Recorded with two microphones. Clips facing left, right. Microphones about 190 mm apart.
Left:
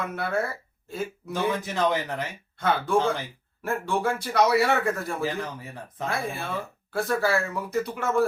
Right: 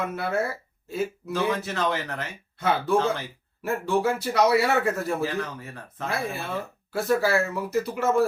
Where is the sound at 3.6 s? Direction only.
Centre (ahead or behind).